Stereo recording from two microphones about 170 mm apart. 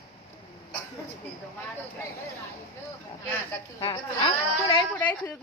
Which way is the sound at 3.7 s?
20° left (ahead or behind).